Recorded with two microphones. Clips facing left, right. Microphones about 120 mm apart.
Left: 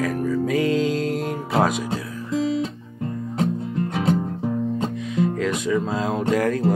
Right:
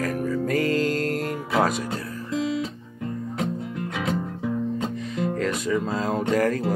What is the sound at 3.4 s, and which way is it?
Music, 35° left (ahead or behind).